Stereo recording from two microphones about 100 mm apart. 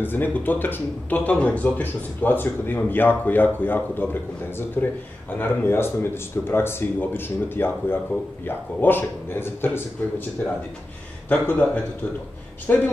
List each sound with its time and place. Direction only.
0.0 s speech: 20° left (ahead or behind)